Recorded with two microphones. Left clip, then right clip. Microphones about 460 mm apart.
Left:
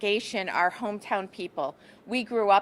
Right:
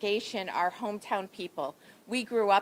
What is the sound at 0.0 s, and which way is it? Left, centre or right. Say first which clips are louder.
A woman's voice: left 4 dB; left.